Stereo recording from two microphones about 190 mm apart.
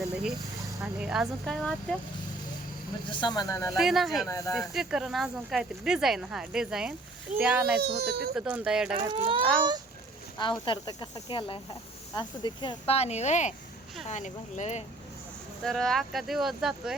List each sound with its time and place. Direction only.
0.8 s speech: 5° right (ahead or behind)
3.1 s speech: 25° left (ahead or behind)
3.8 s speech: centre (ahead or behind)
4.3 s speech: 20° left (ahead or behind)
4.5 s speech: centre (ahead or behind)
7.8 s speech: 60° right (ahead or behind)
8.4 s speech: 5° right (ahead or behind)
9.0 s a child's voice: 30° right (ahead or behind)
10.7 s speech: 25° left (ahead or behind)
15.6 s speech: centre (ahead or behind)